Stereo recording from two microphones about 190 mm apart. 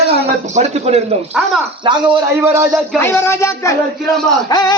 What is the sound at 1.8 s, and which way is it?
Speech, 25° right (ahead or behind).